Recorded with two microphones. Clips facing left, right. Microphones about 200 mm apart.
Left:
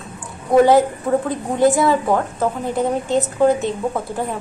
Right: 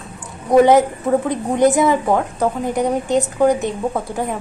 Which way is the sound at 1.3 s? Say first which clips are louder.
Right 1 dB; 20° right (ahead or behind).